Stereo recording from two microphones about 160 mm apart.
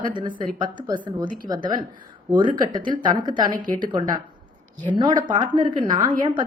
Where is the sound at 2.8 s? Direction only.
55° right (ahead or behind).